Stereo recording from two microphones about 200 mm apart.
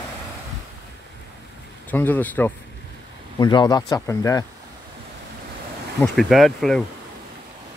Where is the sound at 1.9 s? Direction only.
10° left (ahead or behind).